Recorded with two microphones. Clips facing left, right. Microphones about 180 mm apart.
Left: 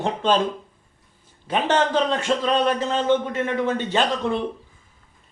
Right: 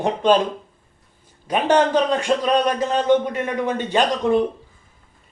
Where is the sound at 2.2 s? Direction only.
15° right (ahead or behind).